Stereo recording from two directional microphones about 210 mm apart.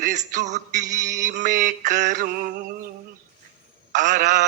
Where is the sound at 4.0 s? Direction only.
35° right (ahead or behind).